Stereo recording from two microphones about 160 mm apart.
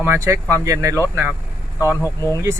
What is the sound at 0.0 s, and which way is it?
Speech, 15° right (ahead or behind).